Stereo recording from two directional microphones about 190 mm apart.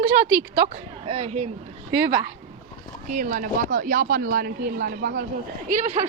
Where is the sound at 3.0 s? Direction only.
45° right (ahead or behind).